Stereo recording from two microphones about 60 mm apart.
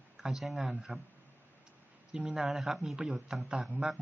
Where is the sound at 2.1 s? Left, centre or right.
Centre.